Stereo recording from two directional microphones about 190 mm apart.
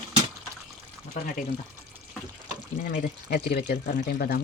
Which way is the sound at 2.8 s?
55° left (ahead or behind).